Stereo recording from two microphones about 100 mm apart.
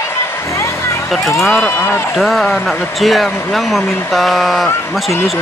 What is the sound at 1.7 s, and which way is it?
Speech, 20° left (ahead or behind).